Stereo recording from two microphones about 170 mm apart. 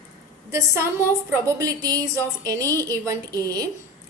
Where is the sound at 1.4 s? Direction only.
20° right (ahead or behind).